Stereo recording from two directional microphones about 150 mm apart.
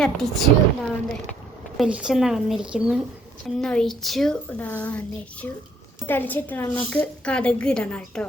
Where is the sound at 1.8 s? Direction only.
5° right (ahead or behind).